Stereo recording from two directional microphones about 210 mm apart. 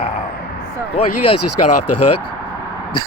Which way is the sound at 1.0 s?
30° left (ahead or behind).